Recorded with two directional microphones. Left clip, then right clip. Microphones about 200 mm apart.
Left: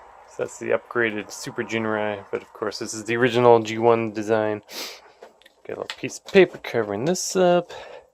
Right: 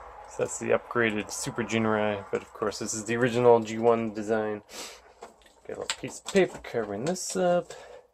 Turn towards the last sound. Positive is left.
turn(degrees=45)  # may be behind; listen again after turning